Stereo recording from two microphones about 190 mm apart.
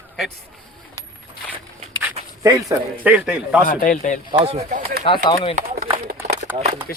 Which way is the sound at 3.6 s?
45° left (ahead or behind).